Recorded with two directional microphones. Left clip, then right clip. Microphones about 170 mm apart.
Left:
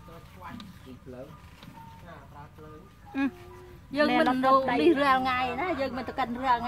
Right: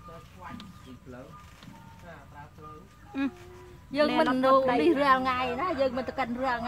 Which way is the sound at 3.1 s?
20° left (ahead or behind).